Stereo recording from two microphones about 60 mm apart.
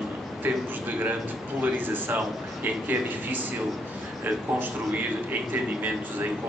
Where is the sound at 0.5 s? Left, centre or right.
Right.